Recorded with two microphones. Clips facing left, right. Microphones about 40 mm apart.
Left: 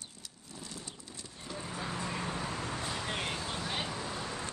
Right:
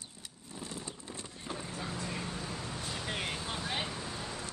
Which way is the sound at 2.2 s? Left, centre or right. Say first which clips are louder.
Left 3 dB; left.